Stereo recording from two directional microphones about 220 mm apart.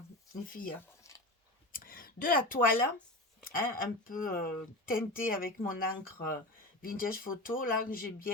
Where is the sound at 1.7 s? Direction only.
40° left (ahead or behind).